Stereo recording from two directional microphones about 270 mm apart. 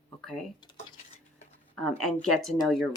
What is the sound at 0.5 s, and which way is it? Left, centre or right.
Speech, centre.